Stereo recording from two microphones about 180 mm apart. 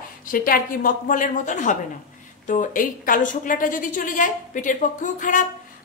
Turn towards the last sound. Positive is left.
turn(degrees=45)  # may be behind; listen again after turning